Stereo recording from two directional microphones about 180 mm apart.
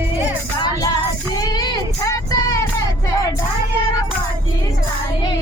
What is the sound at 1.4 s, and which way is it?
Child singing, 20° left (ahead or behind).